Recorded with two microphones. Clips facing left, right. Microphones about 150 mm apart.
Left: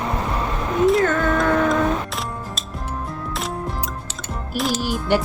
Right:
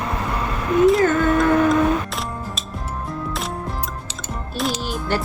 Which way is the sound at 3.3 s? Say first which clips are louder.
Even; centre (ahead or behind).